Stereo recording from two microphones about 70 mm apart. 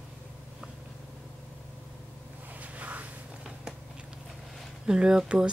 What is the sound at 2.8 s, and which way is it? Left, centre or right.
Walk, right.